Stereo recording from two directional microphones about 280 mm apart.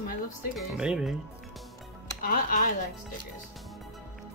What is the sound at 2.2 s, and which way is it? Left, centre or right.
Speech, left.